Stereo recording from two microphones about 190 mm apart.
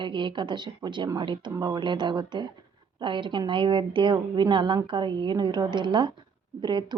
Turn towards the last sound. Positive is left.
turn(degrees=-25)  # may be behind; listen again after turning